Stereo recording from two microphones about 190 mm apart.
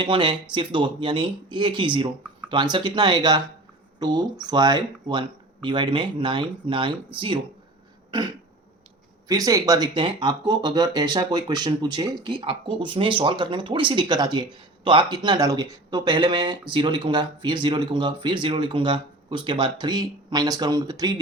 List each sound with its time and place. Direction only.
0.0 s speech: 25° right (ahead or behind)
9.2 s speech: 20° right (ahead or behind)